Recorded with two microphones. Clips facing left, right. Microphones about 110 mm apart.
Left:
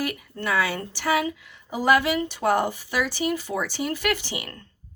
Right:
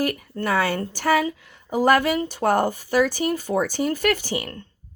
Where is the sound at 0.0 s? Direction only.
45° right (ahead or behind).